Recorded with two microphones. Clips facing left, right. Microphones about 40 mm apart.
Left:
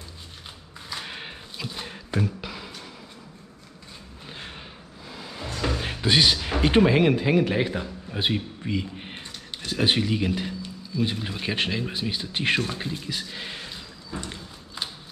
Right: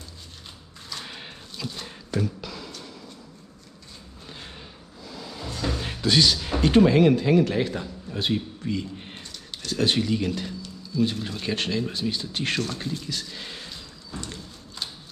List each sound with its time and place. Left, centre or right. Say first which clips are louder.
0.8 s a sound: left 2 dB; centre
4.3 s music: left 2 dB; left
5.8 s speech: even; left